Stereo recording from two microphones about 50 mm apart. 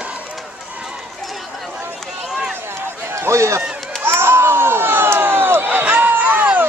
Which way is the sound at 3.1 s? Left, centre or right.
Right.